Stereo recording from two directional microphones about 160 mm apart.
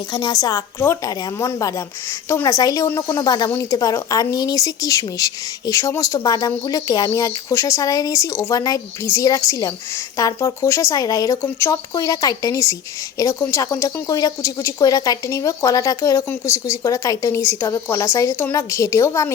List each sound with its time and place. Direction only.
0.1 s a woman's voice: 25° left (ahead or behind)